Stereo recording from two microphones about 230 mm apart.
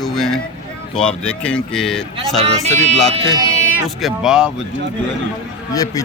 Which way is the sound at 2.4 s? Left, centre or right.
Right.